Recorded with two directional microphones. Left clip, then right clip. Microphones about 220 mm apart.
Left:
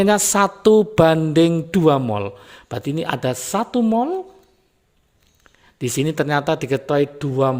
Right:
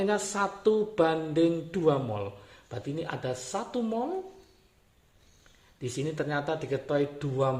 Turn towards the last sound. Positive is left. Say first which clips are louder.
# left 9 dB
turn(degrees=45)  # may be behind; listen again after turning